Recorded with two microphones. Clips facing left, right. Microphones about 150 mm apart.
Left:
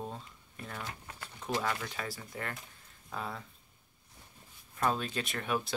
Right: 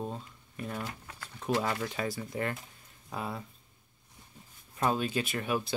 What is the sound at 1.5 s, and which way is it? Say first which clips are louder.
Speech: right 4 dB; 30° right (ahead or behind).